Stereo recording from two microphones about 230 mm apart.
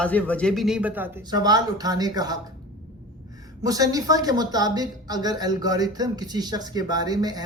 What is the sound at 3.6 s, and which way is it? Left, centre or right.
Speech, centre.